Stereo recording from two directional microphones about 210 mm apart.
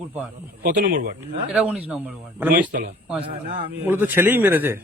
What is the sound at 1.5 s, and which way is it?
A man's voice, 5° right (ahead or behind).